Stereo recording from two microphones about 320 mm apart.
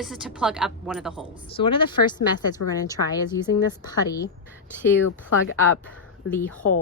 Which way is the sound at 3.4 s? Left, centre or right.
Centre.